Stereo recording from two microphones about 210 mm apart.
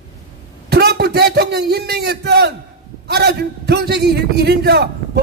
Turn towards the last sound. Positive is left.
turn(degrees=-50)  # may be behind; listen again after turning